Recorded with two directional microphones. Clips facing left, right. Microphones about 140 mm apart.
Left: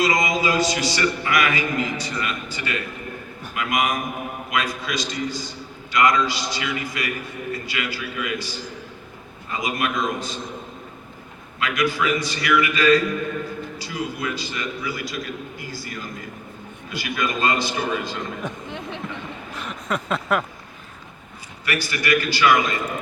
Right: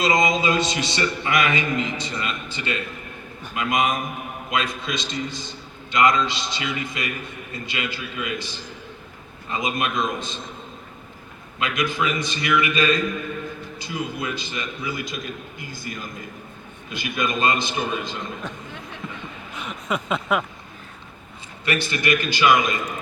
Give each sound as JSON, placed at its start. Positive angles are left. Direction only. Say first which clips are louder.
{"t": 0.0, "sound": "a man's voice", "louder": "right 1 dB", "side_deg": -25}
{"t": 11.6, "sound": "a man's voice", "louder": "left 2 dB", "side_deg": -20}
{"t": 18.4, "sound": "speech", "louder": "left 3 dB", "side_deg": 15}
{"t": 19.5, "sound": "a sound", "louder": "even", "side_deg": 0}
{"t": 21.6, "sound": "a man's voice", "louder": "right 2 dB", "side_deg": -25}